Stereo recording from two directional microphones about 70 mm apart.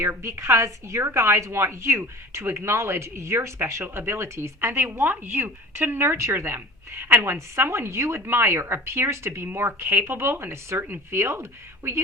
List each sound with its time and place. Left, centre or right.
0.0 s a woman's voice: right